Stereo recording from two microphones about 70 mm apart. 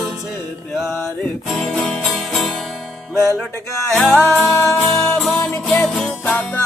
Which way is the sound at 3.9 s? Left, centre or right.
Centre.